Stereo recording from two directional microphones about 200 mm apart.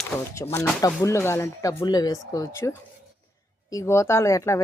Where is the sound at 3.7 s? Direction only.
15° left (ahead or behind).